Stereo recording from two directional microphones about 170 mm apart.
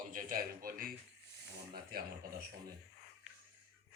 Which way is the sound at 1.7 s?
65° right (ahead or behind).